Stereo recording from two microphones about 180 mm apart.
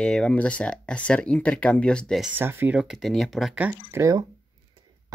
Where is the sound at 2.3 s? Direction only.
10° right (ahead or behind).